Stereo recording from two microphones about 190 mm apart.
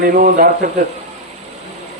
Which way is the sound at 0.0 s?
45° right (ahead or behind).